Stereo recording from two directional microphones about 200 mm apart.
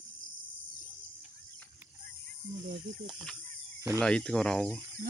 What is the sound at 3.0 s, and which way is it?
Speech, 5° left (ahead or behind).